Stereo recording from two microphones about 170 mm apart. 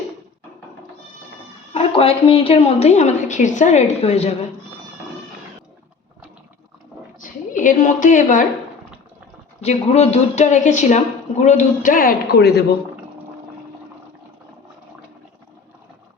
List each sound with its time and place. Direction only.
1.7 s a woman's voice: 35° left (ahead or behind)
7.2 s a woman's voice: 50° left (ahead or behind)
9.6 s a woman's voice: 40° left (ahead or behind); by 12.6 s 75° left (ahead or behind)